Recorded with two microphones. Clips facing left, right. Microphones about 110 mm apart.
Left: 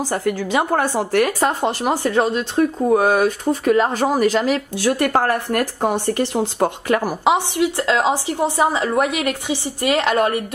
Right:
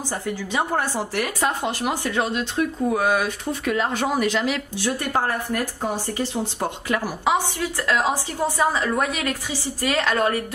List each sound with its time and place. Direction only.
0.1 s a woman's voice: 85° left
0.7 s speech: 50° left (ahead or behind)
4.8 s speech: 75° left (ahead or behind); by 7.2 s 50° left (ahead or behind)
7.5 s a woman's voice: 20° left (ahead or behind)